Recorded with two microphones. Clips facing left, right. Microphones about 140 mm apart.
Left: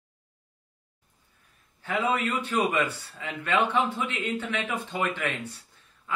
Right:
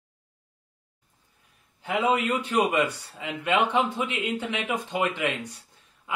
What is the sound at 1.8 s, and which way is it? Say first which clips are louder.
Speech: right 3 dB; 15° right (ahead or behind).